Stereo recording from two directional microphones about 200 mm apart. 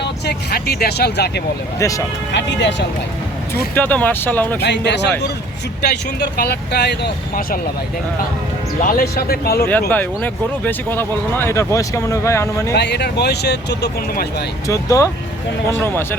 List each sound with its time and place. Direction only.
0.0 s speech: 50° left (ahead or behind)
1.8 s speech: 15° left (ahead or behind)
2.3 s speech: 60° left (ahead or behind)
3.8 s speech: 10° left (ahead or behind)
4.6 s speech: 60° left (ahead or behind)
8.8 s speech: 45° left (ahead or behind)
9.9 s speech: 10° left (ahead or behind)
12.7 s speech: 55° left (ahead or behind)
14.7 s speech: 15° left (ahead or behind)